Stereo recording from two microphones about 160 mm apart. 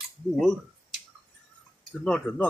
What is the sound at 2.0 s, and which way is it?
Speech, 5° left (ahead or behind).